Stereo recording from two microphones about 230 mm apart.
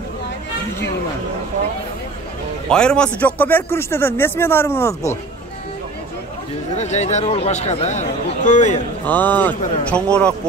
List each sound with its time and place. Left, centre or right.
2.7 s speech: centre
6.7 s speech: left
9.0 s speech: centre